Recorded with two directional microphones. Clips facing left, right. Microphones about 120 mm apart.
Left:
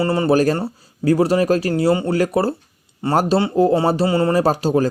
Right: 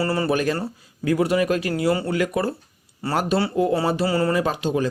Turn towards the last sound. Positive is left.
turn(degrees=40)  # may be behind; listen again after turning